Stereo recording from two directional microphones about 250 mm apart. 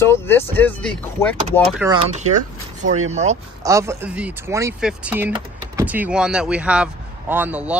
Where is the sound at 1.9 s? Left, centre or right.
Right.